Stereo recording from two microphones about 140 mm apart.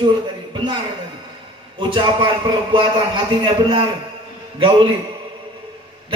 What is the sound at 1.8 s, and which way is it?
A man's voice, 35° right (ahead or behind).